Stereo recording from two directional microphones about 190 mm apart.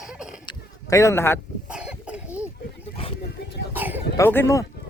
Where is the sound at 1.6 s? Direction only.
5° right (ahead or behind).